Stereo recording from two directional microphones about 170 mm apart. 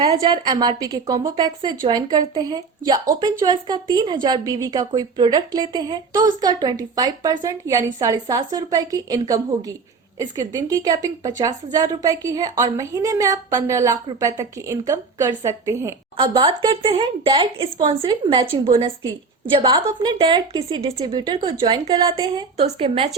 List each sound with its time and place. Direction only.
0.0 s a woman's voice: 25° right (ahead or behind)
16.1 s a woman's voice: 30° right (ahead or behind)
22.6 s speech: 35° right (ahead or behind)